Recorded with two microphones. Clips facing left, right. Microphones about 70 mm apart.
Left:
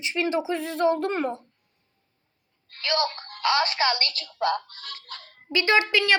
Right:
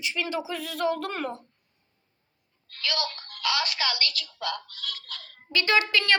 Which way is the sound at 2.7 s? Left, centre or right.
Left.